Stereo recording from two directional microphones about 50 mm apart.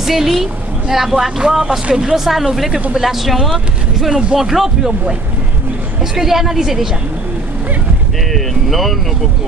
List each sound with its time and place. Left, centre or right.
0.0 s speech: centre
1.9 s speech: centre
2.1 s speech: centre
6.1 s speech: centre
8.3 s speech: centre